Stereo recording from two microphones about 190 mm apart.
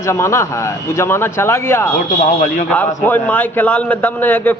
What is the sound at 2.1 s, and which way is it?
Speech, 40° left (ahead or behind).